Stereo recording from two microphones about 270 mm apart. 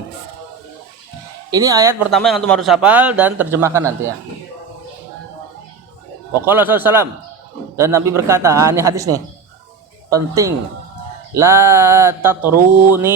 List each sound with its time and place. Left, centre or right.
1.5 s mantra: centre
2.0 s a man's voice: centre
6.4 s mantra: centre
11.3 s mantra: centre